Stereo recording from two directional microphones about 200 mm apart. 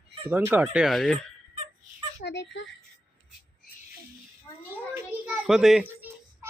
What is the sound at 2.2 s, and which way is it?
Speech, 65° left (ahead or behind).